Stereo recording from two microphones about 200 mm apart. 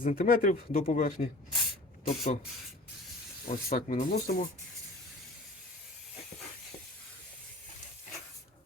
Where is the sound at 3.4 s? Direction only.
50° left (ahead or behind).